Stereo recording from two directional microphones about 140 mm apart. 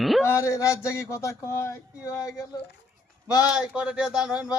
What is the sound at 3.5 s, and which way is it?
Speech, 5° right (ahead or behind).